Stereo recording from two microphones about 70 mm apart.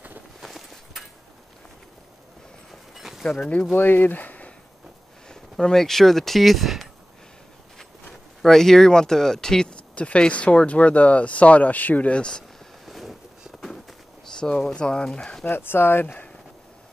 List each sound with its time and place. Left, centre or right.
0.4 s a sound: centre
2.7 s a sound: centre
3.3 s speech: centre
3.7 s speech: left
5.3 s speech: centre
8.1 s speech: centre
12.8 s a sound: centre
14.4 s speech: centre
15.4 s speech: left